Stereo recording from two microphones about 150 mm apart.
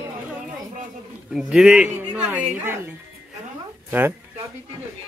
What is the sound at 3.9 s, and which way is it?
Speech, 15° right (ahead or behind).